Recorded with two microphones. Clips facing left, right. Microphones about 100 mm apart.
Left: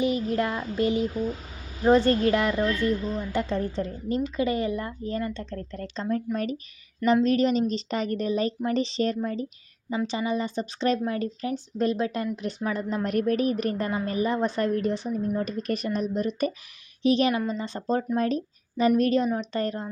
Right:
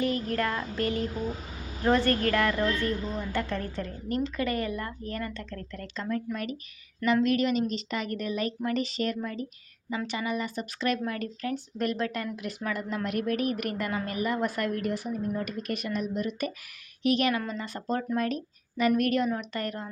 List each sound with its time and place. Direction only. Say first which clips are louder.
0.0 s a woman's voice: left 3 dB; 20° left (ahead or behind)
12.4 s a woman's voice: left 4 dB; 30° left (ahead or behind)